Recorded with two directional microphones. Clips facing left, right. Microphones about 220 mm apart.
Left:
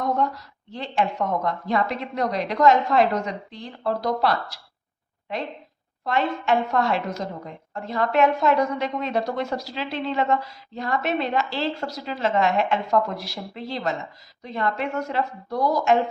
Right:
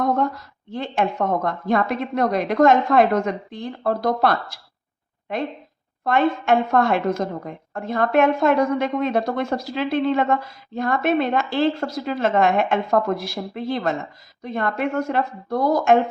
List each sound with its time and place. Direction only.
0.0 s a woman's voice: 50° right (ahead or behind)
6.1 s a woman's voice: 50° right (ahead or behind)